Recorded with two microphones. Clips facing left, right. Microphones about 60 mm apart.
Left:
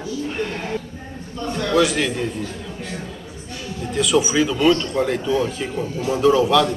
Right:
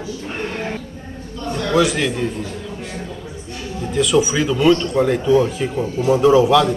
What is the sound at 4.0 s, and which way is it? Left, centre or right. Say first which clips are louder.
A man's voice: right 1 dB; centre.